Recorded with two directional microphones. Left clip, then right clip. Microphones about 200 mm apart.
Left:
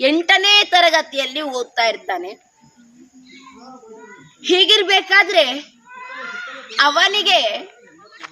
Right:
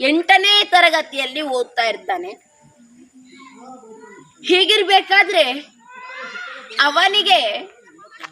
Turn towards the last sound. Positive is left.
turn(degrees=15)  # may be behind; listen again after turning